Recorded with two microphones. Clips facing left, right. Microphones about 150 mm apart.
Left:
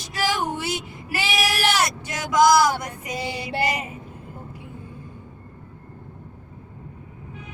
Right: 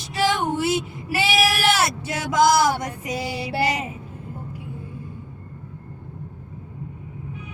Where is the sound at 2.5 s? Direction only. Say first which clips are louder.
Left 1 dB; 5° right (ahead or behind).